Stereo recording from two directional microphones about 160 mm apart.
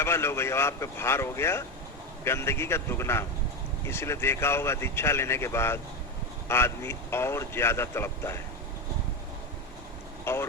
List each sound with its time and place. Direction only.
0.0 s speech: 15° left (ahead or behind)
10.3 s speech: 15° left (ahead or behind)